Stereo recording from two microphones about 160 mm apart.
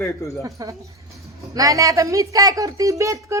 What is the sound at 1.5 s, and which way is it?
A woman's voice, 20° right (ahead or behind).